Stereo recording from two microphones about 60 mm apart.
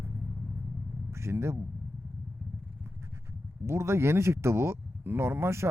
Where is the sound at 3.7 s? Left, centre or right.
Right.